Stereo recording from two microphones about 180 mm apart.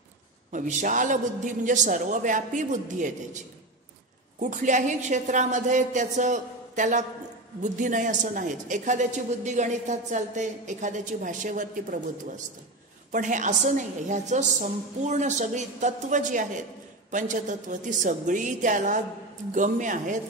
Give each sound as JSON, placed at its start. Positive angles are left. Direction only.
{"t": 0.5, "sound": "a woman's voice", "side_deg": -45}
{"t": 4.4, "sound": "a woman's voice", "side_deg": -45}
{"t": 13.1, "sound": "a woman's voice", "side_deg": -45}